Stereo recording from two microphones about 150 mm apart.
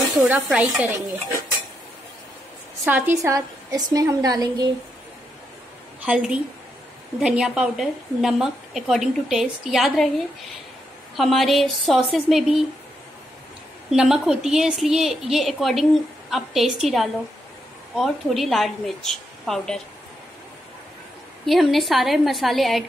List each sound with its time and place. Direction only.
0.2 s a woman's voice: 5° right (ahead or behind)
2.8 s a woman's voice: 10° right (ahead or behind)
6.0 s a woman's voice: 5° right (ahead or behind)
11.1 s a woman's voice: centre (ahead or behind)
13.8 s a woman's voice: 5° right (ahead or behind)
21.5 s a woman's voice: centre (ahead or behind)